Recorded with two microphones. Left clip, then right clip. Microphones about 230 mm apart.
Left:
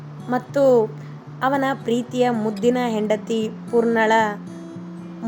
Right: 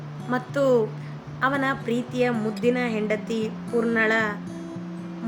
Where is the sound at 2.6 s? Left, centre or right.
Centre.